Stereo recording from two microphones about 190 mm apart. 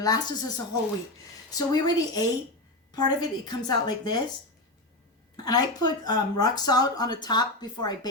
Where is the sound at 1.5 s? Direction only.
20° left (ahead or behind).